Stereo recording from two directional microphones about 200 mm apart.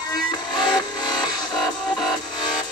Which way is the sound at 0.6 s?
20° left (ahead or behind).